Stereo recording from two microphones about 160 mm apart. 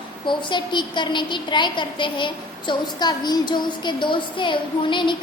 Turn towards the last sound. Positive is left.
turn(degrees=30)  # may be behind; listen again after turning